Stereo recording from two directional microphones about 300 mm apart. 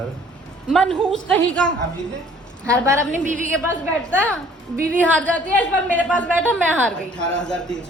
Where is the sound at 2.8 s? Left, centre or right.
Centre.